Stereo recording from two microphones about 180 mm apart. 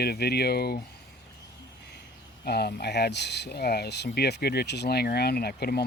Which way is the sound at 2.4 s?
65° left (ahead or behind).